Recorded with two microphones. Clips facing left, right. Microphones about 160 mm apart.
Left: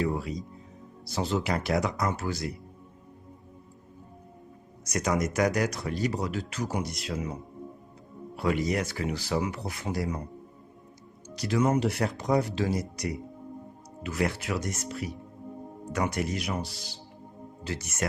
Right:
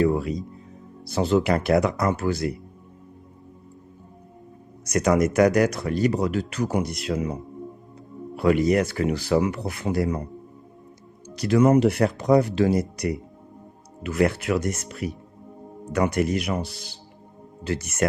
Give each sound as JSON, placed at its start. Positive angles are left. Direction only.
{"t": 0.0, "sound": "speech", "side_deg": -60}
{"t": 4.9, "sound": "speech", "side_deg": -60}
{"t": 8.4, "sound": "speech", "side_deg": -60}
{"t": 11.3, "sound": "speech", "side_deg": -60}